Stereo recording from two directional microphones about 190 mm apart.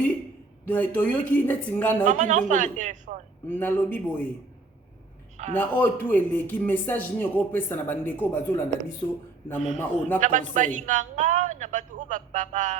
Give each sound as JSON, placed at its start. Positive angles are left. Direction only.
{"t": 0.7, "sound": "speech", "side_deg": 10}
{"t": 2.0, "sound": "a man's voice", "side_deg": -40}
{"t": 3.5, "sound": "speech", "side_deg": 10}
{"t": 5.5, "sound": "a man's voice", "side_deg": 10}
{"t": 10.2, "sound": "a man's voice", "side_deg": -40}